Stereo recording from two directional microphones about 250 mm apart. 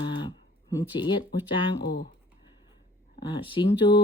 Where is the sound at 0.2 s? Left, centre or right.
Centre.